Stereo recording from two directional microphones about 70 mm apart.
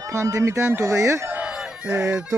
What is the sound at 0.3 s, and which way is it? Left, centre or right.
Speech, right.